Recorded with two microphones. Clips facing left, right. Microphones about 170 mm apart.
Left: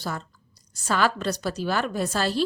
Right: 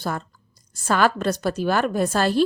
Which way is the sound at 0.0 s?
55° right (ahead or behind).